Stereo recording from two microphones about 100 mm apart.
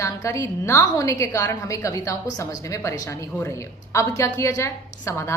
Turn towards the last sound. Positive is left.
turn(degrees=30)  # may be behind; listen again after turning